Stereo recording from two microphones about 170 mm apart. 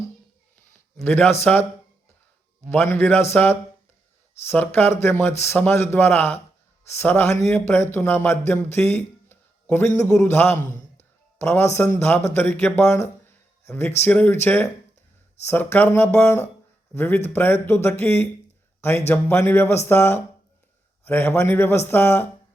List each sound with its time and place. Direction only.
1.0 s speech: 10° left (ahead or behind)
2.6 s speech: 10° left (ahead or behind)
10.7 s a sound: 50° left (ahead or behind)
11.3 s speech: 15° left (ahead or behind)